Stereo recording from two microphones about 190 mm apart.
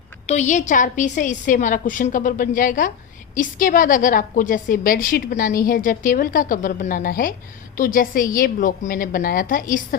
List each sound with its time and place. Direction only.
0.3 s a woman's voice: 40° left (ahead or behind)